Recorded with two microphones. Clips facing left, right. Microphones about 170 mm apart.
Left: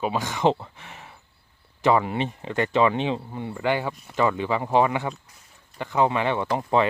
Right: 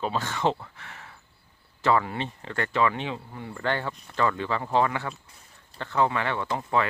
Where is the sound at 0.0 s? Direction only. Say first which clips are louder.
Left 4 dB; 15° left (ahead or behind).